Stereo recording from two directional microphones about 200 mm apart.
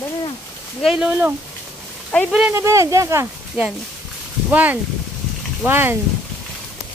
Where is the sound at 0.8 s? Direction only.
5° right (ahead or behind).